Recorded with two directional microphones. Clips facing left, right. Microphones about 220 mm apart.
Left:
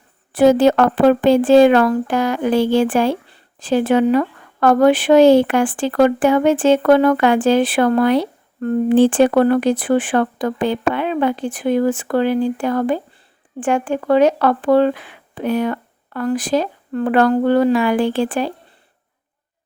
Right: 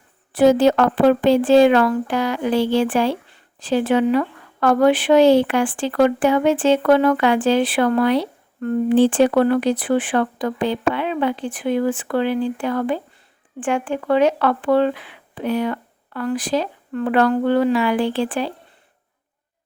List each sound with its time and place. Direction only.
0.3 s speech: 50° left (ahead or behind)